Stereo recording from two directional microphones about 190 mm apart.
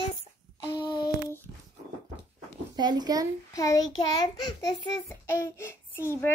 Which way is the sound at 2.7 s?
20° right (ahead or behind).